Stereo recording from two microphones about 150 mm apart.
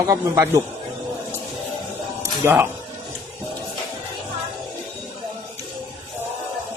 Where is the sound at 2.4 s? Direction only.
15° right (ahead or behind).